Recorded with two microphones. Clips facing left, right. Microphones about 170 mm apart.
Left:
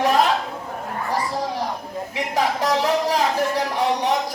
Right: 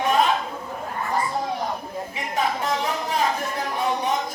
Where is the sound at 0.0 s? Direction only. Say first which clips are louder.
Left 2 dB; 80° left.